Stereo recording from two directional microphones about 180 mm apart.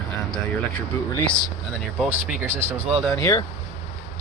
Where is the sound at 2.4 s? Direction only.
15° right (ahead or behind).